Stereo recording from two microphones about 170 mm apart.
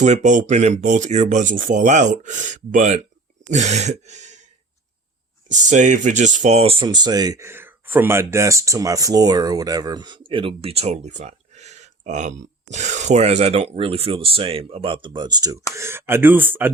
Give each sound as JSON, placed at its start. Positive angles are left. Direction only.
{"t": 0.0, "sound": "speech", "side_deg": -45}
{"t": 5.5, "sound": "speech", "side_deg": -45}